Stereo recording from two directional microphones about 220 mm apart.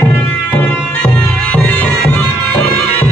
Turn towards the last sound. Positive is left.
turn(degrees=10)  # may be behind; listen again after turning